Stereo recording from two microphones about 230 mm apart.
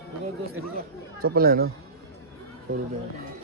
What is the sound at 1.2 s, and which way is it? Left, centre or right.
Speech, right.